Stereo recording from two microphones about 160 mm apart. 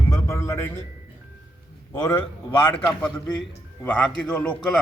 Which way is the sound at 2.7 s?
10° left (ahead or behind).